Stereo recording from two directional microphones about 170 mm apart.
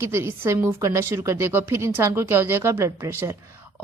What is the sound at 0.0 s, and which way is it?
A woman's voice, 15° right (ahead or behind).